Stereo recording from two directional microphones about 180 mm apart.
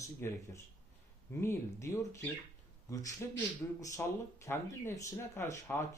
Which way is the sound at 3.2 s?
15° left (ahead or behind).